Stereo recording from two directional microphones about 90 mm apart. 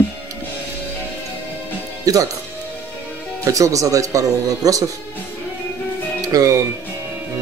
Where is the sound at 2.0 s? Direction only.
40° right (ahead or behind).